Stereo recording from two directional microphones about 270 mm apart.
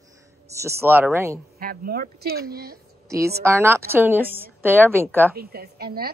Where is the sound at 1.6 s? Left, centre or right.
Right.